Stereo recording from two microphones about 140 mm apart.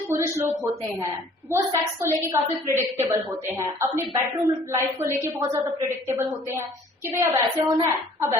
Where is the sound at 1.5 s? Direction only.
20° right (ahead or behind).